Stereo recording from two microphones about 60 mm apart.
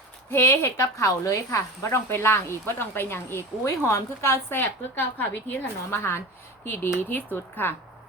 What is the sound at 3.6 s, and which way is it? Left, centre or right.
A woman's voice, left.